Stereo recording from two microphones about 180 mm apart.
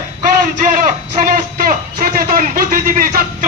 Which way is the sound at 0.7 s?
50° right (ahead or behind).